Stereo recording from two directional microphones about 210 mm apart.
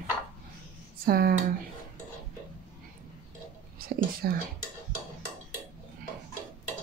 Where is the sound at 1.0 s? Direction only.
45° right (ahead or behind).